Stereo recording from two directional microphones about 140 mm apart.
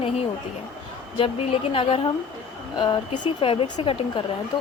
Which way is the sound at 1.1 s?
40° left (ahead or behind).